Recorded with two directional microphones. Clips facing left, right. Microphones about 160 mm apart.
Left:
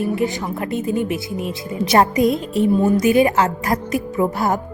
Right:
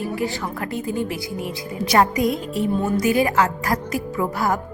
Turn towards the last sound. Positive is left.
turn(degrees=25)  # may be behind; listen again after turning